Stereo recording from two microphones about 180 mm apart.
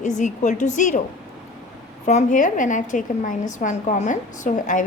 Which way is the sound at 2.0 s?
40° left (ahead or behind).